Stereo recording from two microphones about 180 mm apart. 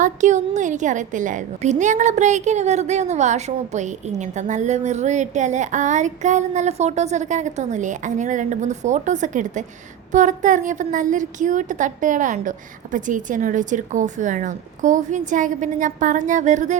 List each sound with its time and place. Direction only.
0.0 s a woman's voice: 40° right (ahead or behind)